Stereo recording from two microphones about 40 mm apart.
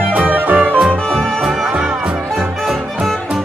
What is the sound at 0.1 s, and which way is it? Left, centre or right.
Music, right.